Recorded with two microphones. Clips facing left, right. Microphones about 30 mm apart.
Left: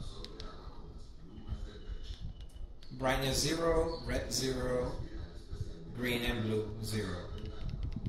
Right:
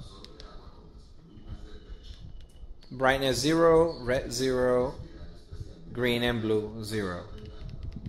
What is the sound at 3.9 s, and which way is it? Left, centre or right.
Speech, right.